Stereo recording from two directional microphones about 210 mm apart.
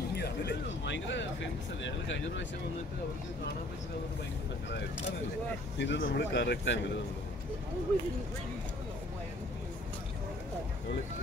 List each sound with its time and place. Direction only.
0.1 s speech: 50° left (ahead or behind)
5.8 s speech: 55° left (ahead or behind)